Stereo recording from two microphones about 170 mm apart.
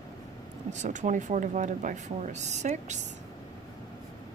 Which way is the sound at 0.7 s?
45° right (ahead or behind).